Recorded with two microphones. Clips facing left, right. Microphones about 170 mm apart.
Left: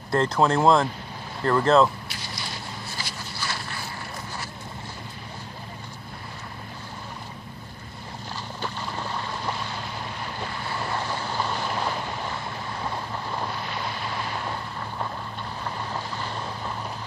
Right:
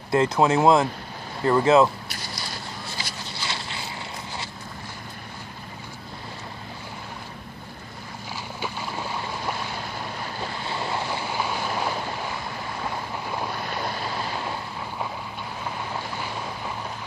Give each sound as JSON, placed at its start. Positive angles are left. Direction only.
{"t": 0.1, "sound": "speech", "side_deg": -10}
{"t": 3.3, "sound": "a sound", "side_deg": -20}
{"t": 8.5, "sound": "boat", "side_deg": -5}
{"t": 10.7, "sound": "boat", "side_deg": -20}